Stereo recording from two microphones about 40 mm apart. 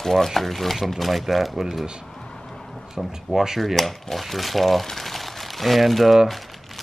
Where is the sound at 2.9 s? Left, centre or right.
Centre.